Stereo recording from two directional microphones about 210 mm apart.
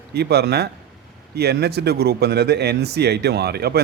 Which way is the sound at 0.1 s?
50° right (ahead or behind).